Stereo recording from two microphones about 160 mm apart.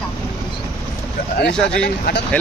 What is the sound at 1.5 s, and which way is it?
Speech, 5° left (ahead or behind).